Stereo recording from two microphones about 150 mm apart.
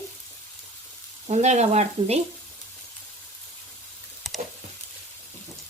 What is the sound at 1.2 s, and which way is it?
Speech, 50° right (ahead or behind).